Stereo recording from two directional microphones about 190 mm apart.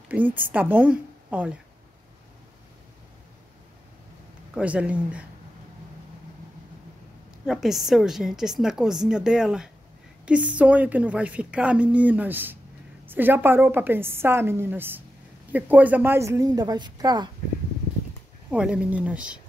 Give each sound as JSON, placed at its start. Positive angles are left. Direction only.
{"t": 0.1, "sound": "a woman's voice", "side_deg": -10}
{"t": 4.6, "sound": "a woman's voice", "side_deg": -5}
{"t": 7.4, "sound": "a woman's voice", "side_deg": 0}
{"t": 18.5, "sound": "a woman's voice", "side_deg": -5}